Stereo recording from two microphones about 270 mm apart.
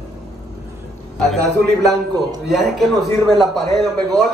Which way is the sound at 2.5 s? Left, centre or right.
Centre.